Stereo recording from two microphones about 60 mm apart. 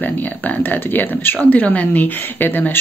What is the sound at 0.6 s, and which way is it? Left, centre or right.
Speech, left.